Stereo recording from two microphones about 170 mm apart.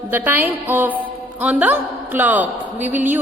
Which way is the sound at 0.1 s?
10° right (ahead or behind).